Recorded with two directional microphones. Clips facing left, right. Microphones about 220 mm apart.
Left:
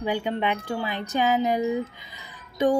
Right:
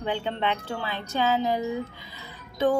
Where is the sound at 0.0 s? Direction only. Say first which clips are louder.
Left 2 dB; 10° left (ahead or behind).